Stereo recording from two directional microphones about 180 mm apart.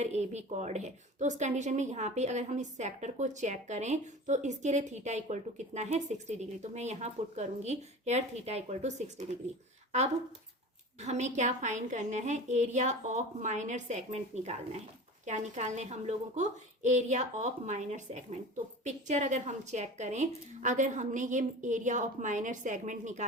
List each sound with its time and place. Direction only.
0.0 s a woman's voice: 40° right (ahead or behind)
11.0 s a woman's voice: 40° right (ahead or behind)